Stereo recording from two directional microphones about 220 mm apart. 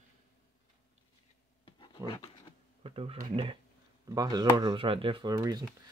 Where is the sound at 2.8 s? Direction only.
25° right (ahead or behind).